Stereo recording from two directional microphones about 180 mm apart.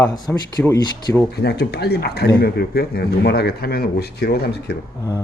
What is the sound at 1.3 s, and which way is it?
Speech, 65° left (ahead or behind).